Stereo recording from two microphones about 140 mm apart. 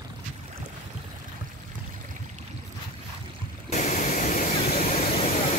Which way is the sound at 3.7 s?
60° left (ahead or behind).